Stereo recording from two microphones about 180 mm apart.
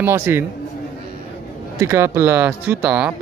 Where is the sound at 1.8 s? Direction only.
15° right (ahead or behind).